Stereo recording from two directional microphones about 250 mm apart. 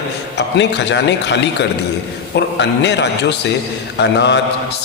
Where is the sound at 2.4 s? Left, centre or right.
Left.